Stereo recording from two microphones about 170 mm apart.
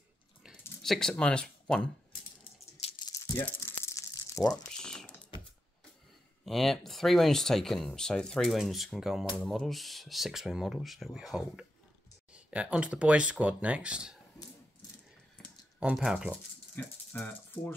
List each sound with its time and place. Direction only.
0.4 s a sound: centre (ahead or behind)
2.8 s rattle: 35° left (ahead or behind)
3.2 s crumpling: 15° left (ahead or behind)
4.6 s typing: 5° left (ahead or behind)
6.4 s speech: centre (ahead or behind)
15.8 s speech: 5° right (ahead or behind)
16.7 s speech: 10° left (ahead or behind)